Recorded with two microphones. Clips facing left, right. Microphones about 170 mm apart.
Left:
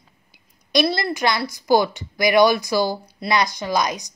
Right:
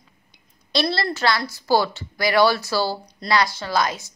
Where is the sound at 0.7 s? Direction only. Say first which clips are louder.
Left 3 dB; 15° left (ahead or behind).